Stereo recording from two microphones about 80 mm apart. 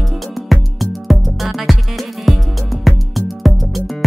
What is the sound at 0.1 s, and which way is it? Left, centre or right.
Music, centre.